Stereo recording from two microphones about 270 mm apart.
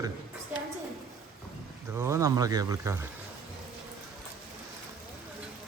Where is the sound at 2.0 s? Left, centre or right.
Centre.